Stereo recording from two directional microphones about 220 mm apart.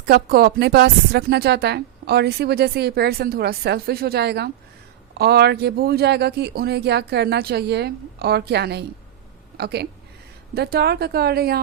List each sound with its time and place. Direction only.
0.0 s a woman's voice: 45° right (ahead or behind)